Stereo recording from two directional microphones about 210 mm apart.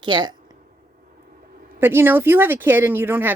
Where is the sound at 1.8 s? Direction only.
10° right (ahead or behind).